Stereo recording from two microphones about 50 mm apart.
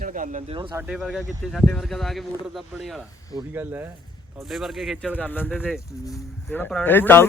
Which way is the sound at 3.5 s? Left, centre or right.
Right.